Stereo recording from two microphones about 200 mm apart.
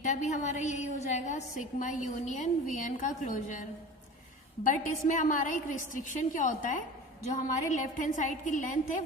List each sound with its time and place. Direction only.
0.0 s a woman's voice: 35° left (ahead or behind)